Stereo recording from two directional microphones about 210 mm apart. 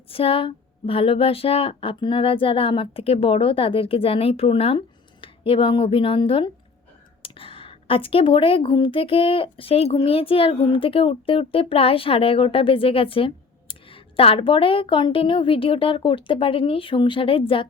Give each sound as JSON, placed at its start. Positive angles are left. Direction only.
{"t": 0.1, "sound": "a woman's voice", "side_deg": 25}